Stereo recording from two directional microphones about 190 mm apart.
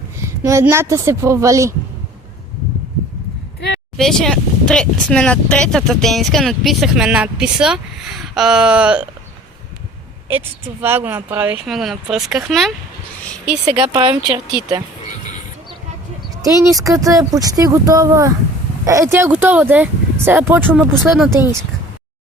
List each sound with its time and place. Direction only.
0.2 s speech: 15° right (ahead or behind)
3.9 s speech: centre (ahead or behind)
10.2 s speech: 10° right (ahead or behind)
13.8 s speech: 25° right (ahead or behind)
16.4 s speech: 20° right (ahead or behind)